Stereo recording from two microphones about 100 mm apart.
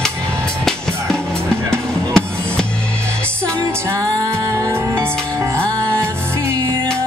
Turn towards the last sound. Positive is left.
turn(degrees=-30)  # may be behind; listen again after turning